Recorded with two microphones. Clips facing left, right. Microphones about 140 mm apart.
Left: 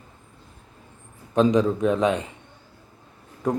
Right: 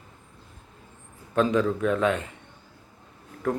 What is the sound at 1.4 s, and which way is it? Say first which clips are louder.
Speech: left 4 dB; 20° left (ahead or behind).